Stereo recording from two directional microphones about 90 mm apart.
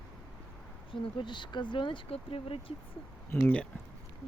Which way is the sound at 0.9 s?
65° left (ahead or behind).